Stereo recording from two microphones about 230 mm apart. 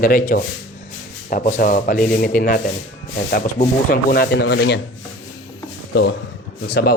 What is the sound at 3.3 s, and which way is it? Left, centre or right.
Rub, left.